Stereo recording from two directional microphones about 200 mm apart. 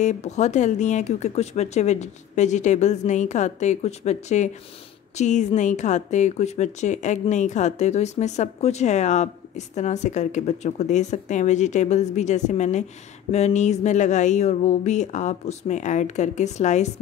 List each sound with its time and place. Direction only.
0.0 s speech: 35° left (ahead or behind)